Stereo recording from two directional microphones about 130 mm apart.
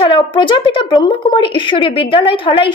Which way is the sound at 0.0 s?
40° left (ahead or behind).